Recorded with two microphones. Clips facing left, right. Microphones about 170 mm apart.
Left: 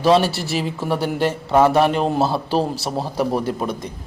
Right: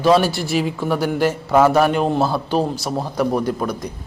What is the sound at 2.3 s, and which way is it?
A man's voice, 30° left (ahead or behind).